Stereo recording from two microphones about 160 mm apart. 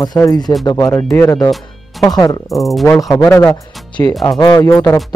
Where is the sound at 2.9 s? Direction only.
20° left (ahead or behind).